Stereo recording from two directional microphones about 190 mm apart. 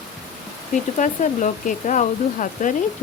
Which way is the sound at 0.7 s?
40° left (ahead or behind).